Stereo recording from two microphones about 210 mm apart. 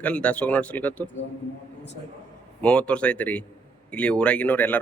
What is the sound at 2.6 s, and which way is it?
Speech, 5° left (ahead or behind).